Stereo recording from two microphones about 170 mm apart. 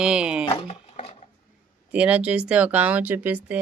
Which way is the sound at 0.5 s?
40° left (ahead or behind).